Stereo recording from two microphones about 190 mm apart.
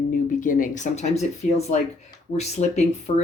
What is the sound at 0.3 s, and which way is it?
Speech, 45° left (ahead or behind).